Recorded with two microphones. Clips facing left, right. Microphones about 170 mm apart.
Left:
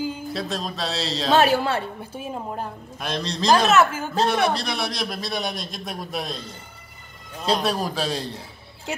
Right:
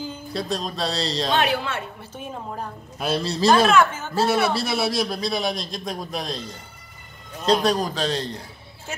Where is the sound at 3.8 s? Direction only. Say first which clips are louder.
Left 1 dB; 10° left (ahead or behind).